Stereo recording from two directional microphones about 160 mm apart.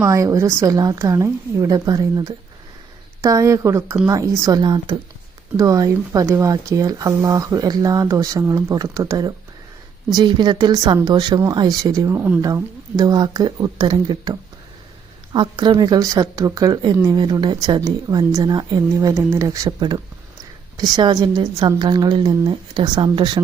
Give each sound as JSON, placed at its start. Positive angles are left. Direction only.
{"t": 0.0, "sound": "speech", "side_deg": -20}